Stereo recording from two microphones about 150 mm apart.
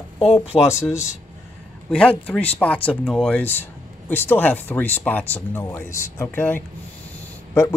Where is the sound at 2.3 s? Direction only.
10° left (ahead or behind).